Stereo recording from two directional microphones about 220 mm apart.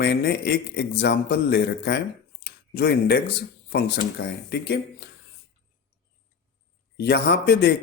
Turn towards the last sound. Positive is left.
turn(degrees=45)  # may be behind; listen again after turning